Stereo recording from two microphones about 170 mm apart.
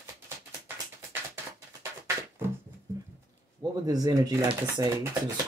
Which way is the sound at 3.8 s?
20° right (ahead or behind).